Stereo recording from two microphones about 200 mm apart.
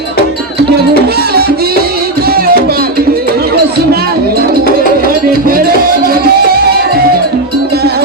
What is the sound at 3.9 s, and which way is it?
Music, 50° right (ahead or behind).